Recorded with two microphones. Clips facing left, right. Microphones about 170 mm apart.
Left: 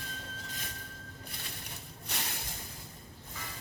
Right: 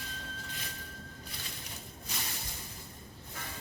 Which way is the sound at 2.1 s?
65° left (ahead or behind).